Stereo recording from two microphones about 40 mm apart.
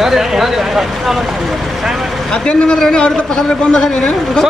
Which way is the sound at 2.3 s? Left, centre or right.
Left.